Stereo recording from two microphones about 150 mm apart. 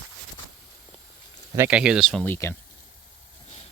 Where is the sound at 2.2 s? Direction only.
15° left (ahead or behind).